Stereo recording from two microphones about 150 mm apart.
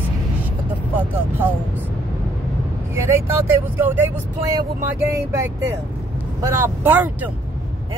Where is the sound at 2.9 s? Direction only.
15° right (ahead or behind).